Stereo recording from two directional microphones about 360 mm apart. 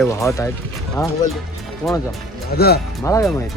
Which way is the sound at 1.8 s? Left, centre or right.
Centre.